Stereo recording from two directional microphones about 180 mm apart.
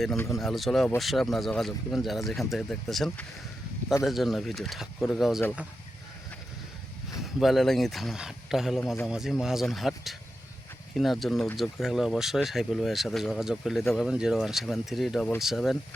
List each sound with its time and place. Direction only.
0.2 s speech: 15° left (ahead or behind)
0.4 s speech: centre (ahead or behind)
7.2 s speech: centre (ahead or behind)